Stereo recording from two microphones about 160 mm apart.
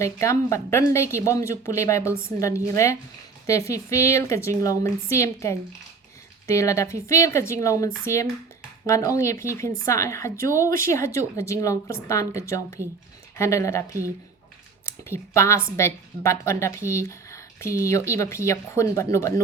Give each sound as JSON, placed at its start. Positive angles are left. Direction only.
{"t": 0.0, "sound": "a woman's voice", "side_deg": 20}